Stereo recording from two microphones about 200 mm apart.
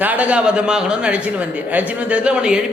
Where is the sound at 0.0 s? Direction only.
10° right (ahead or behind).